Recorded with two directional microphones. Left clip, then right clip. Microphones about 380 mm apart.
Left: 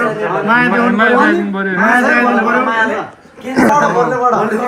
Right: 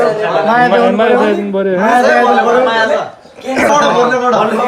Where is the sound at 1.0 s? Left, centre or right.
Centre.